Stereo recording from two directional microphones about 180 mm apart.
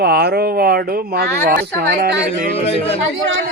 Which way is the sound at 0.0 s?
65° right (ahead or behind).